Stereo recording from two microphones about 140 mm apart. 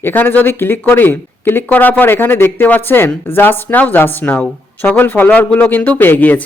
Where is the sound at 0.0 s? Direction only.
15° left (ahead or behind).